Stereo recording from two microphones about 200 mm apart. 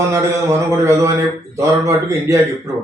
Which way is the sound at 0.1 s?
15° right (ahead or behind).